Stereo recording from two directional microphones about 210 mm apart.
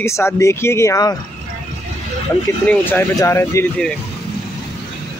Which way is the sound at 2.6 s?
10° left (ahead or behind).